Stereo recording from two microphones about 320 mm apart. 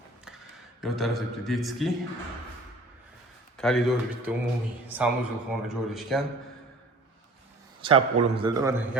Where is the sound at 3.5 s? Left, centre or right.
Centre.